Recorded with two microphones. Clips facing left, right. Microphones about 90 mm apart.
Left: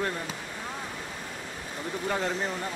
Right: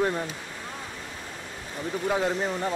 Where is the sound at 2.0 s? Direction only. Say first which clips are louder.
Right 4 dB; 5° right (ahead or behind).